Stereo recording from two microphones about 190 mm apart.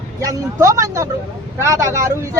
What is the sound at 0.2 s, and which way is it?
Speech, 15° right (ahead or behind).